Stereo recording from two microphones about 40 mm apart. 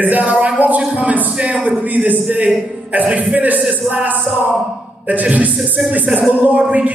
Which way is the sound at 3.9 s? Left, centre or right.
Right.